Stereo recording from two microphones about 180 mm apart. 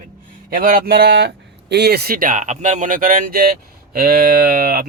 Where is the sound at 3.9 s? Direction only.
60° right (ahead or behind).